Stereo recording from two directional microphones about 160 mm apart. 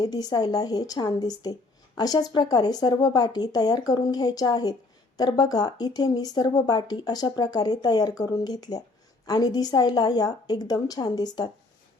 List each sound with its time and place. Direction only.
0.0 s speech: 25° left (ahead or behind)